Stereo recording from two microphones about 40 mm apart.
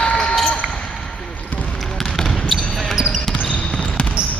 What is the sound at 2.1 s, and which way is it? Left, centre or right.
Basketball bounce, centre.